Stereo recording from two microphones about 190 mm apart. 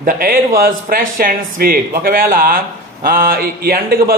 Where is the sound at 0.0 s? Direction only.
45° right (ahead or behind).